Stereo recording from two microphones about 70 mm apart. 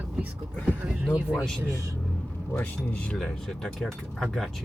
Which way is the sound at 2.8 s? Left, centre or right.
Centre.